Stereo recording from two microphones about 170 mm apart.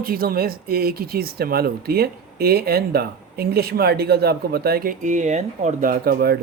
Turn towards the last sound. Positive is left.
turn(degrees=-65)  # may be behind; listen again after turning